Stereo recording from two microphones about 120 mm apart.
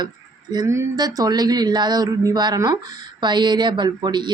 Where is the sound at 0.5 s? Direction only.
25° right (ahead or behind).